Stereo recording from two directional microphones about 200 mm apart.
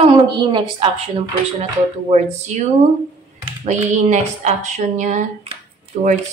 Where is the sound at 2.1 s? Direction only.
35° right (ahead or behind).